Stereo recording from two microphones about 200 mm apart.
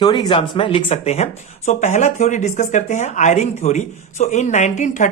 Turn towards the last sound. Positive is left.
turn(degrees=40)  # may be behind; listen again after turning